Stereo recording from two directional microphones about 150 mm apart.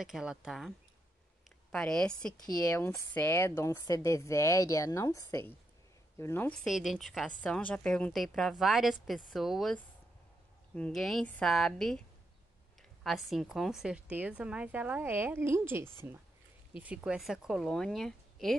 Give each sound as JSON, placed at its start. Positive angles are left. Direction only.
{"t": 0.0, "sound": "a woman's voice", "side_deg": -5}
{"t": 2.7, "sound": "a woman's voice", "side_deg": 15}
{"t": 6.6, "sound": "a woman's voice", "side_deg": 0}
{"t": 13.0, "sound": "a woman's voice", "side_deg": 0}